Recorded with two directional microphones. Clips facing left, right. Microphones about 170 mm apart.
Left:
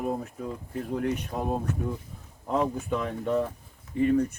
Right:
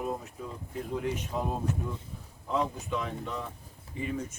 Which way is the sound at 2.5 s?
55° left (ahead or behind).